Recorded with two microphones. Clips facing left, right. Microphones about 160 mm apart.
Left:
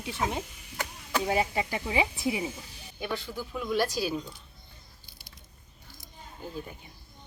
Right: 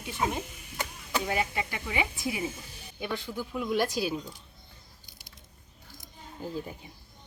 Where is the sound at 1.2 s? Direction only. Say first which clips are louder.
Left 4 dB; 30° left (ahead or behind).